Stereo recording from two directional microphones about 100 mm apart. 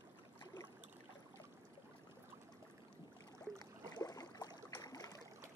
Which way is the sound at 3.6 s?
35° left (ahead or behind).